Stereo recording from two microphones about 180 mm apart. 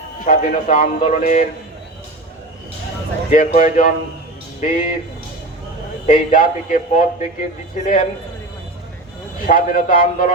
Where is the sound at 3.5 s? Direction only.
40° left (ahead or behind).